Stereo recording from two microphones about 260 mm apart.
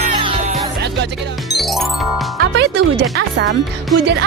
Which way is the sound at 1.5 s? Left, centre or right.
Centre.